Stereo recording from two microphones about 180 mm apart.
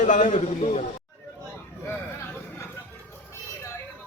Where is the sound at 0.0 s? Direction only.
45° left (ahead or behind).